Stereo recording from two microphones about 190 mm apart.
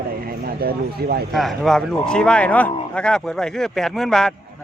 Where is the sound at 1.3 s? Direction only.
Centre (ahead or behind).